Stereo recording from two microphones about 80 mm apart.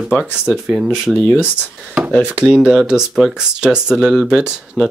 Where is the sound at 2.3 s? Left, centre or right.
Centre.